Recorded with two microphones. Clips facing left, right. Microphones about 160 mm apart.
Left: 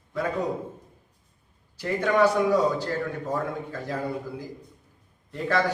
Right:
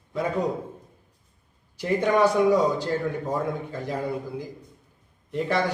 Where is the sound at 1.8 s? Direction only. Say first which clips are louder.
Right 1 dB; 15° right (ahead or behind).